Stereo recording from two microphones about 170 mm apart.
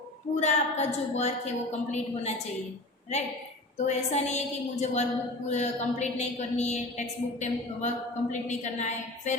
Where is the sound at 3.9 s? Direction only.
40° left (ahead or behind).